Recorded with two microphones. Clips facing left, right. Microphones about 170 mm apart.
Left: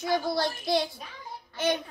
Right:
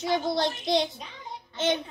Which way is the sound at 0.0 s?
20° right (ahead or behind).